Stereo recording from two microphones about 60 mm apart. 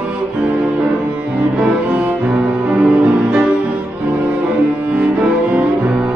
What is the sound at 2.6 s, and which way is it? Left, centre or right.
Music, centre.